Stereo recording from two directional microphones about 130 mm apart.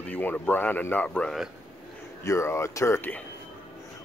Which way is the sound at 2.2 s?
20° left (ahead or behind).